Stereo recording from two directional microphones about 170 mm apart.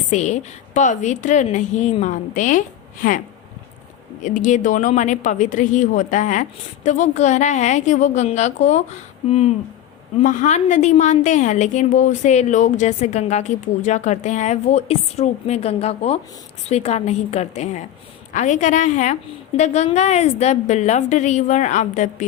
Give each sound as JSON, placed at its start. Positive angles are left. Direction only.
{"t": 0.1, "sound": "a woman's voice", "side_deg": 45}
{"t": 4.2, "sound": "a woman's voice", "side_deg": 50}
{"t": 10.2, "sound": "a woman's voice", "side_deg": 45}